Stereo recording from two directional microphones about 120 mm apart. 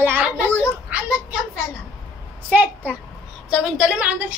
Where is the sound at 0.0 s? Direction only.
15° right (ahead or behind).